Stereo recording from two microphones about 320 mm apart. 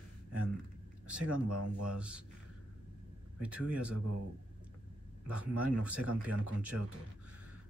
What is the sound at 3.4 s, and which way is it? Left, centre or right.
Speech, centre.